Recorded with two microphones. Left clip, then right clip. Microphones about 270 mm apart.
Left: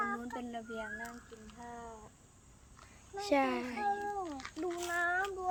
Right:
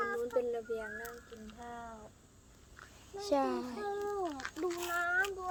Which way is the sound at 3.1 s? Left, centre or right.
Centre.